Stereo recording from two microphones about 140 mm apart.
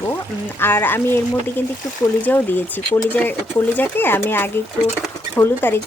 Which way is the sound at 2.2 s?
15° left (ahead or behind).